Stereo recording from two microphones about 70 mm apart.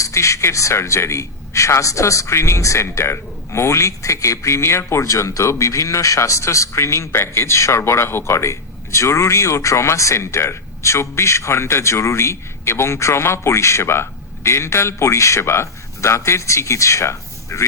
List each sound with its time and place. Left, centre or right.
0.0 s a man's voice: left